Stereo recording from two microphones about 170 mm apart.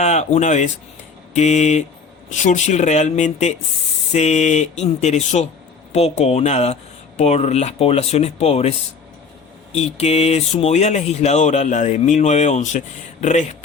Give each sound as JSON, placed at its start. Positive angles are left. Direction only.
{"t": 0.0, "sound": "speech", "side_deg": 40}
{"t": 9.7, "sound": "speech", "side_deg": 40}